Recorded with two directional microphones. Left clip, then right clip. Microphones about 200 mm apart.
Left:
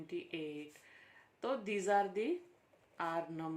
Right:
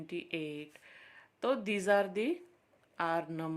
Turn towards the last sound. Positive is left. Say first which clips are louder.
# right 5 dB
turn(degrees=-45)  # may be behind; listen again after turning